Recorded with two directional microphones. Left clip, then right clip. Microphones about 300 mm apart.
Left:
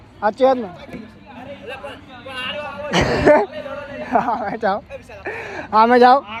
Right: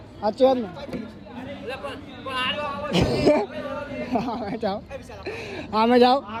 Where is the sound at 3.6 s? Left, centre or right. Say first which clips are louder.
Left 2 dB; centre.